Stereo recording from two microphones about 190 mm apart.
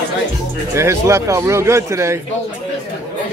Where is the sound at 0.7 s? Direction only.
15° right (ahead or behind).